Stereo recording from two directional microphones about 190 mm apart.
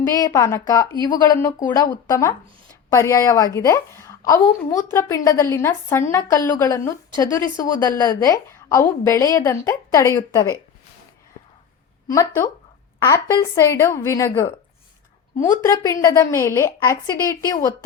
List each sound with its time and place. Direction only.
0.0 s a woman's voice: 20° left (ahead or behind)
12.0 s a woman's voice: 15° left (ahead or behind)